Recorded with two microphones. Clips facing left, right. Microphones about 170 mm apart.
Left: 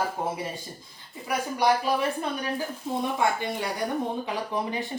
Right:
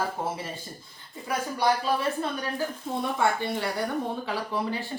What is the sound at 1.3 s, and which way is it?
Speech, 15° left (ahead or behind).